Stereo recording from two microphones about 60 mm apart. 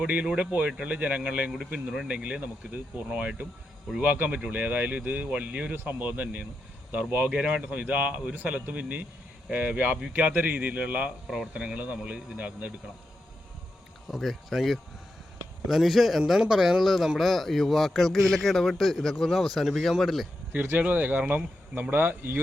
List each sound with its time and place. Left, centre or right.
0.0 s speech: centre
5.7 s speech: right
14.1 s a man's voice: centre
20.7 s speech: right